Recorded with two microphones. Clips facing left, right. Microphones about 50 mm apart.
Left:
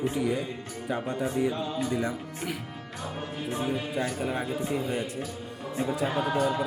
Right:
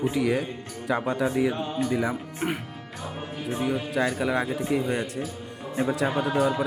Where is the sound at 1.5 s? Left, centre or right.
Right.